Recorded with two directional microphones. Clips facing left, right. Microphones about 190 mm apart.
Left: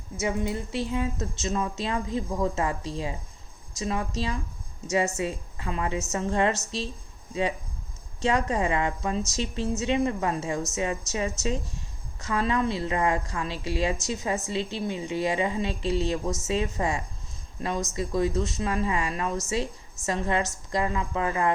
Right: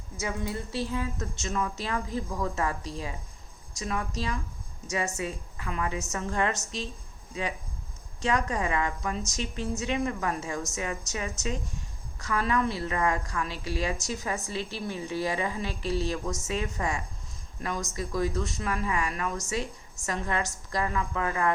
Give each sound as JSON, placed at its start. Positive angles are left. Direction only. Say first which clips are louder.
{"t": 0.2, "sound": "a woman's voice", "louder": "left 4 dB", "side_deg": 20}
{"t": 8.2, "sound": "a woman's voice", "louder": "left 3 dB", "side_deg": 30}